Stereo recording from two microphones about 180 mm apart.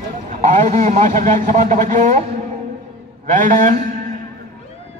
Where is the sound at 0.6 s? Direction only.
40° right (ahead or behind).